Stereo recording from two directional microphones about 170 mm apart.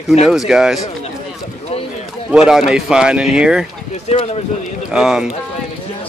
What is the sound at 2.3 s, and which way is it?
Speech, 5° right (ahead or behind).